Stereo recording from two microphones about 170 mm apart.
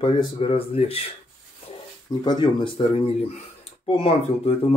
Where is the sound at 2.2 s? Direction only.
25° left (ahead or behind).